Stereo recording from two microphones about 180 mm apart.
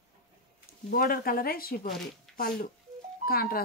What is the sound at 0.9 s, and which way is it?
Speech, 55° left (ahead or behind).